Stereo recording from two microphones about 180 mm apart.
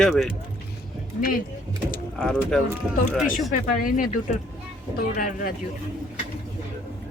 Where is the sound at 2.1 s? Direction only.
Centre (ahead or behind).